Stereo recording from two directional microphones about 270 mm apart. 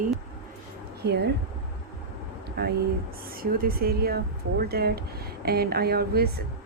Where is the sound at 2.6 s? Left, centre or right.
Right.